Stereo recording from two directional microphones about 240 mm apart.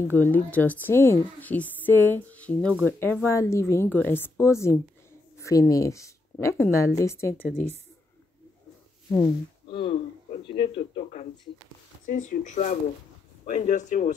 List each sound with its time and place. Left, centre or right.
0.1 s a woman's voice: centre
9.1 s speech: left